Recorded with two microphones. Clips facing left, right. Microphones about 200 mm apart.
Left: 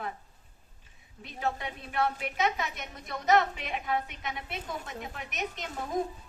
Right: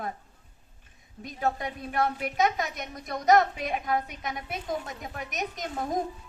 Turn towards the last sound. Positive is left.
turn(degrees=-40)  # may be behind; listen again after turning